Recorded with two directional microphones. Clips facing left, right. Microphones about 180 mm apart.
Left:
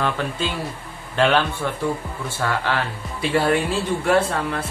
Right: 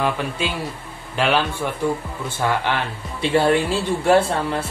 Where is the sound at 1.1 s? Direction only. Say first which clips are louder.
Left 1 dB; 10° right (ahead or behind).